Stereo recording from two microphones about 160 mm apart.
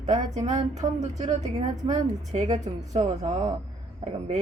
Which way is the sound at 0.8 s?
25° right (ahead or behind).